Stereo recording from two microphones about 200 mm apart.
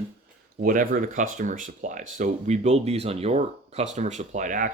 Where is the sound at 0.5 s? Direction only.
45° right (ahead or behind).